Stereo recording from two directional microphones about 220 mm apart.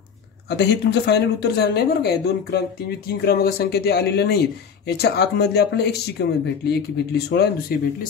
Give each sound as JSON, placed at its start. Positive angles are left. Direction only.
{"t": 0.5, "sound": "speech", "side_deg": 50}